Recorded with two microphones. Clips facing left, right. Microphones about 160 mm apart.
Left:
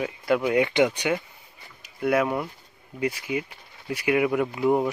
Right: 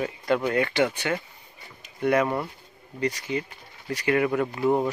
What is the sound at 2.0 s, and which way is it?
Speech, 5° left (ahead or behind).